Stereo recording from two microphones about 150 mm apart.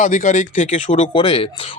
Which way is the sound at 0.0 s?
60° left (ahead or behind).